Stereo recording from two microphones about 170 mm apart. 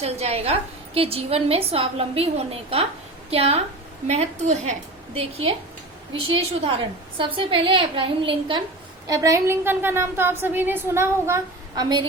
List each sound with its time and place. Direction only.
0.0 s a woman's voice: 40° right (ahead or behind)
9.0 s a woman's voice: 20° right (ahead or behind)